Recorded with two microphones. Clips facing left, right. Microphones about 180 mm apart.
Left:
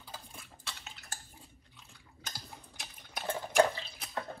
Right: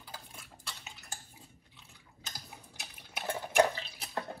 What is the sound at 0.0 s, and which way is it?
Stir, centre (ahead or behind).